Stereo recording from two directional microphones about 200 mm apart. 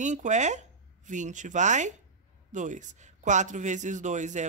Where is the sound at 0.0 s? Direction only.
35° right (ahead or behind).